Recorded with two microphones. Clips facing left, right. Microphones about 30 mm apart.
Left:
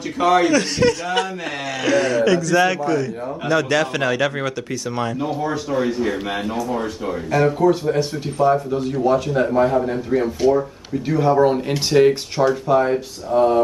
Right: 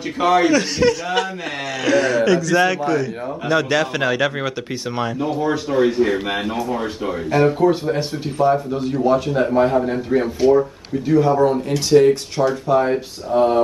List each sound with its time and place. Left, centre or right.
0.2 s a man's voice: centre
11.1 s speech: centre
12.4 s a man's voice: centre
12.9 s a man's voice: centre